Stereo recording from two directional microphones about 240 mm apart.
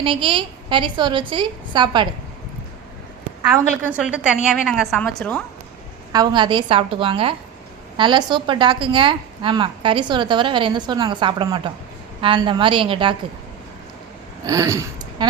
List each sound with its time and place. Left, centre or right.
0.0 s a woman's voice: right
3.5 s a woman's voice: centre
6.1 s a woman's voice: centre
14.4 s speech: centre